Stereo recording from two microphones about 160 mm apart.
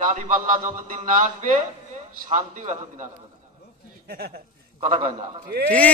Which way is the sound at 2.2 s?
50° right (ahead or behind).